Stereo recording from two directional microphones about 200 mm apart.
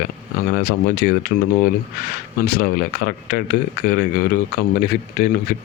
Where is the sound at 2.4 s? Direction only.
50° left (ahead or behind).